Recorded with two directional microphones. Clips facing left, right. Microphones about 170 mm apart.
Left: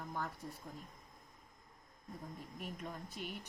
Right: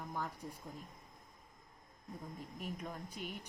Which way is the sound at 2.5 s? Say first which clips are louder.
Right 1 dB; 10° right (ahead or behind).